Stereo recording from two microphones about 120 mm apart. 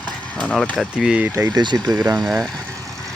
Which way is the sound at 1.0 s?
10° right (ahead or behind).